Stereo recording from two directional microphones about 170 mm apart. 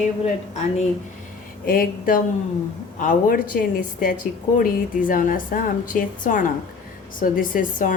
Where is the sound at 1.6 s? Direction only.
55° left (ahead or behind).